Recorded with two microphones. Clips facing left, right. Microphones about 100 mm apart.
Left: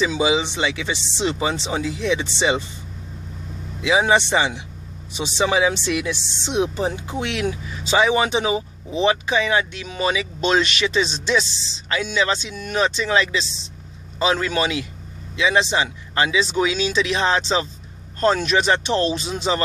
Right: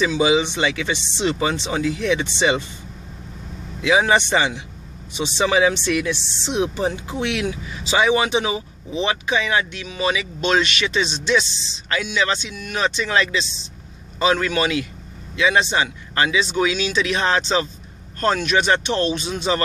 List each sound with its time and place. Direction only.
0.0 s speech: 20° left (ahead or behind)
3.8 s speech: 25° left (ahead or behind)
8.0 s speech: 30° left (ahead or behind)